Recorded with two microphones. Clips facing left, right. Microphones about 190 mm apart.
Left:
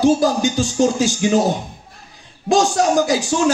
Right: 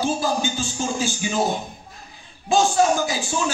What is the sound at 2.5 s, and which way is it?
Speech, 75° left (ahead or behind).